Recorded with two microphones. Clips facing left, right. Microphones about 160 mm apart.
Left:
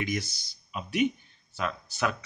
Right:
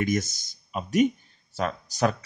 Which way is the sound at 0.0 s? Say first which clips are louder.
Right 6 dB; 45° right (ahead or behind).